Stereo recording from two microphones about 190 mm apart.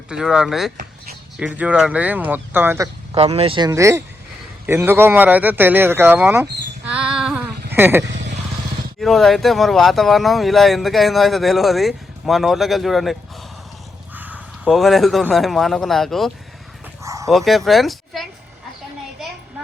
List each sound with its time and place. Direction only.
0.1 s a man's voice: 5° right (ahead or behind)
3.2 s speech: 30° right (ahead or behind)
3.7 s a man's voice: 15° right (ahead or behind)
6.8 s a sound: 5° right (ahead or behind)
9.0 s speech: centre (ahead or behind)
14.2 s a sound: 10° right (ahead or behind)
14.6 s speech: centre (ahead or behind)
17.0 s dog: 15° right (ahead or behind)
17.2 s speech: centre (ahead or behind)